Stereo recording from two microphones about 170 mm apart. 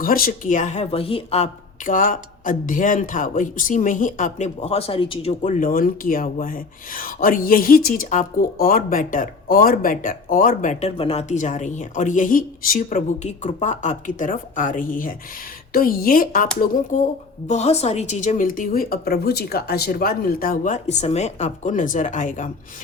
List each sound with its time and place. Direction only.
0.0 s speech: 55° left (ahead or behind)